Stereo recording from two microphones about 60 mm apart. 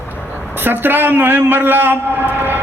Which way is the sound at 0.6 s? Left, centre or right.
Right.